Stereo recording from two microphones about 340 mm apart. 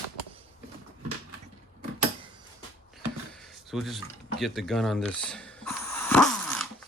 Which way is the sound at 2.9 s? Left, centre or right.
Centre.